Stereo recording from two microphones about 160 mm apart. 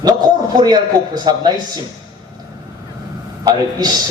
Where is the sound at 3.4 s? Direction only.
25° right (ahead or behind).